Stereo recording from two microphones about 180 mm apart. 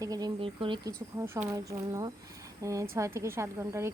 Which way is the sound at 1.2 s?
10° right (ahead or behind).